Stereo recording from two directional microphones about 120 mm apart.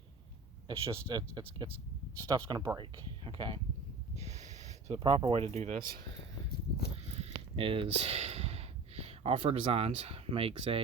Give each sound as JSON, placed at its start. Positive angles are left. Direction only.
{"t": 0.7, "sound": "speech", "side_deg": -50}
{"t": 2.1, "sound": "speech", "side_deg": -30}
{"t": 4.1, "sound": "snort", "side_deg": -65}
{"t": 4.9, "sound": "speech", "side_deg": -45}
{"t": 5.5, "sound": "speech", "side_deg": -70}
{"t": 7.1, "sound": "a sound", "side_deg": -60}